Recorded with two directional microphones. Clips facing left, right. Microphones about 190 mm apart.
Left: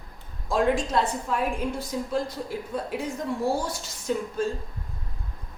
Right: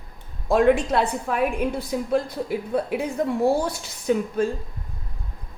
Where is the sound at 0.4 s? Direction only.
60° right (ahead or behind).